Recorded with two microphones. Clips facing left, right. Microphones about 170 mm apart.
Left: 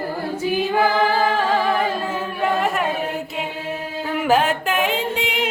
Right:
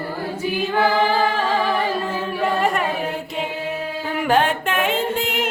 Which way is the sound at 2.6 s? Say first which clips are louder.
Right 1 dB; centre (ahead or behind).